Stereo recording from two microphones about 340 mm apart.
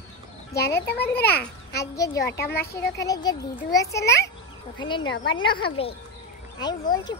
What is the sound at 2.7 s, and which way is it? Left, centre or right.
A child's voice, centre.